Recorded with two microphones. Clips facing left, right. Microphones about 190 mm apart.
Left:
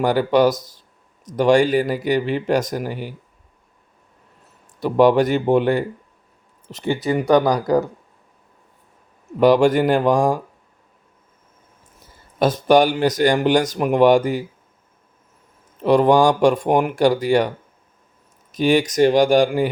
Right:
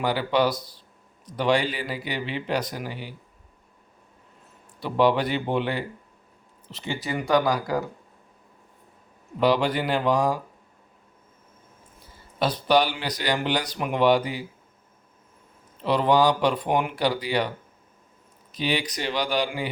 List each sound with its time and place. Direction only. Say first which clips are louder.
0.0 s speech: left 7 dB; 45° left (ahead or behind)
4.8 s speech: left 7 dB; 45° left (ahead or behind)
7.1 s speech: left 6 dB; 40° left (ahead or behind)
9.4 s speech: left 8 dB; 45° left (ahead or behind)
12.4 s speech: left 7 dB; 45° left (ahead or behind)
15.8 s speech: left 6 dB; 50° left (ahead or behind)
18.5 s speech: left 11 dB; 45° left (ahead or behind)